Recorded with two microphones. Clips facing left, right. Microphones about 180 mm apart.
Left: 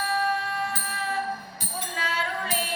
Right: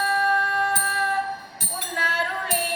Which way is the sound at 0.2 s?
60° right (ahead or behind).